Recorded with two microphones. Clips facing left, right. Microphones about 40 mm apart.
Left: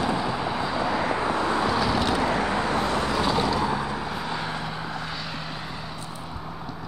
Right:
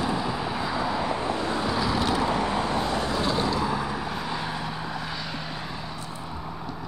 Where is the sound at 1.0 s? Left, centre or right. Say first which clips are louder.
Left 3 dB; left.